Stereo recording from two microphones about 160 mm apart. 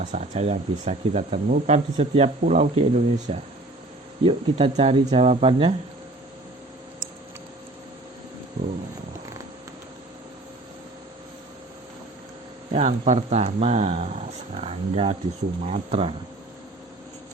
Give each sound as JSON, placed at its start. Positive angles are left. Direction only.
{"t": 0.0, "sound": "speech", "side_deg": -45}
{"t": 4.2, "sound": "speech", "side_deg": -35}
{"t": 8.6, "sound": "a sound", "side_deg": -60}
{"t": 12.7, "sound": "speech", "side_deg": -40}